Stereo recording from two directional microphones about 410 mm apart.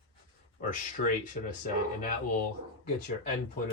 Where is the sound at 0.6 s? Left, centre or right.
Centre.